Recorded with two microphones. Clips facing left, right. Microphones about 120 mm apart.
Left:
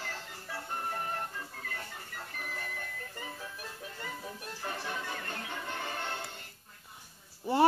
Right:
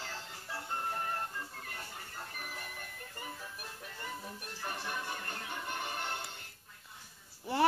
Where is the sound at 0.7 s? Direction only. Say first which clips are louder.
Even; 20° left (ahead or behind).